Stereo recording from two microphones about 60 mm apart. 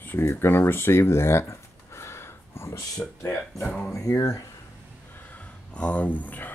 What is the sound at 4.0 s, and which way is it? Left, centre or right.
Speech, left.